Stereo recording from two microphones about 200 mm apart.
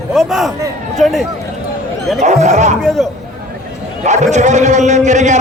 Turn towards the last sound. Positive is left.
turn(degrees=-35)  # may be behind; listen again after turning